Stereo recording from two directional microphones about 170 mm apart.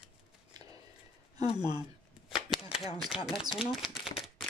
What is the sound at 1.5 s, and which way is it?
Speech, 25° right (ahead or behind).